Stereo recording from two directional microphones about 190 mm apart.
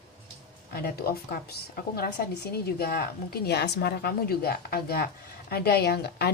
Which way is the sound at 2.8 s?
55° left (ahead or behind).